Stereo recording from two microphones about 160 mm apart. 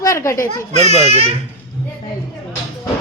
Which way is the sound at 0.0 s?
20° left (ahead or behind).